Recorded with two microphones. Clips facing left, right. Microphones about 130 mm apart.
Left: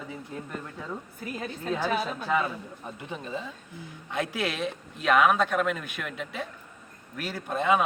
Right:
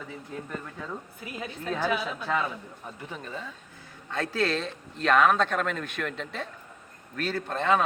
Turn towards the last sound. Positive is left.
turn(degrees=10)  # may be behind; listen again after turning